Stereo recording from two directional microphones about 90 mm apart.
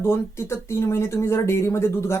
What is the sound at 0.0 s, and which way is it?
Speech, 30° left (ahead or behind).